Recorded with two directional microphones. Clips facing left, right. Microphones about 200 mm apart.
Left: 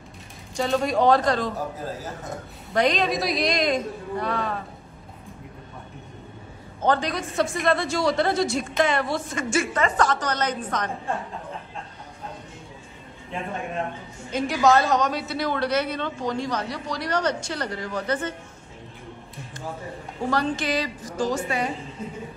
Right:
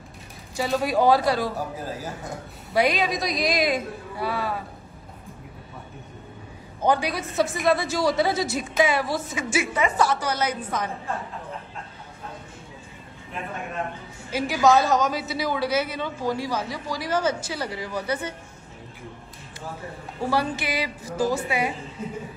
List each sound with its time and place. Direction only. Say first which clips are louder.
0.6 s a woman's voice: left 1 dB; 5° right (ahead or behind)
6.8 s a woman's voice: even; 10° right (ahead or behind)
14.3 s a woman's voice: even; centre (ahead or behind)
20.2 s a woman's voice: left 1 dB; 10° right (ahead or behind)